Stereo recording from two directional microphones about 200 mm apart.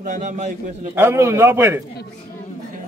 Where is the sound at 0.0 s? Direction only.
40° right (ahead or behind).